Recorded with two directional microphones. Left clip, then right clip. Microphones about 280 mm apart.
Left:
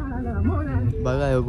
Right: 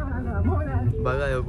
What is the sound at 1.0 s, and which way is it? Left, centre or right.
Speech, centre.